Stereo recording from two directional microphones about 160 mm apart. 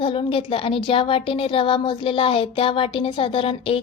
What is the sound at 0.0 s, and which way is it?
A woman's voice, 35° left (ahead or behind).